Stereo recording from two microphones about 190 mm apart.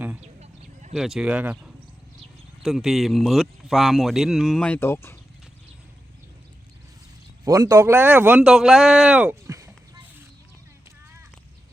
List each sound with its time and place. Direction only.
0.2 s a sound: 35° right (ahead or behind)
0.9 s speech: centre (ahead or behind); by 5.1 s 15° left (ahead or behind)
7.4 s speech: 20° right (ahead or behind)